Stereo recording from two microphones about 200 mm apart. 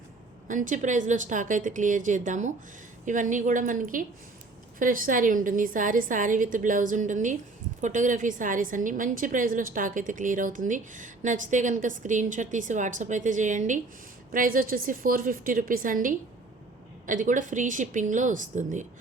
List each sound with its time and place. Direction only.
0.4 s a woman's voice: 40° right (ahead or behind)